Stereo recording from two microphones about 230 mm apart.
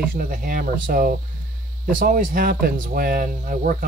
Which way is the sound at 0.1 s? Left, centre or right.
Right.